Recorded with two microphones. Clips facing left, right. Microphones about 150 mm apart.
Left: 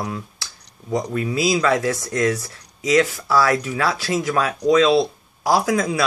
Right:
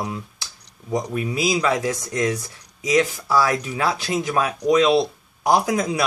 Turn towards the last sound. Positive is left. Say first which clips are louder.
# left 1 dB
turn(degrees=-20)  # may be behind; listen again after turning